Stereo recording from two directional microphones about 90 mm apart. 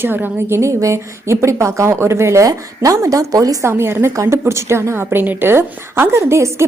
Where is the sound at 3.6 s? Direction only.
30° right (ahead or behind).